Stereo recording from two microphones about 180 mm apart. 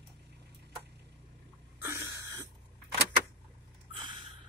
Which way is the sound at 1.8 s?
15° right (ahead or behind).